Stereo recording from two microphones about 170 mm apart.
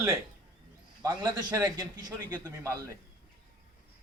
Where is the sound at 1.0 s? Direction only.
25° right (ahead or behind).